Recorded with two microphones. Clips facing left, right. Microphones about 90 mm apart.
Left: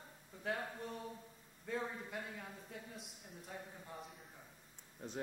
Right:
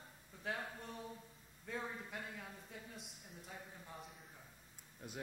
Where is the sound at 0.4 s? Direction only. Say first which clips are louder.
Left 3 dB; centre (ahead or behind).